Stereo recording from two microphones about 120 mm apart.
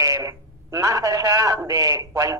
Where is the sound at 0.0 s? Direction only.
25° right (ahead or behind).